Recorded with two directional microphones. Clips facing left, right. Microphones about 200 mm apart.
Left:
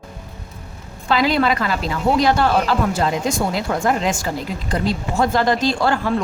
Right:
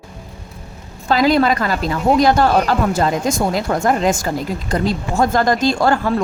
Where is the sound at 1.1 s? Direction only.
40° right (ahead or behind).